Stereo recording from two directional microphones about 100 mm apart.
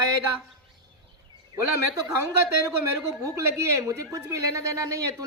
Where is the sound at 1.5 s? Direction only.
40° right (ahead or behind).